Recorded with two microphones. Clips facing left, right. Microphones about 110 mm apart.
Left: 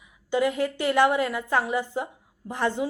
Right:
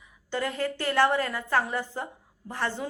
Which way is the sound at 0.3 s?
15° left (ahead or behind).